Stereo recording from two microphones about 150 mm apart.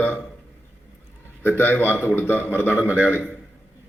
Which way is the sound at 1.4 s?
15° left (ahead or behind).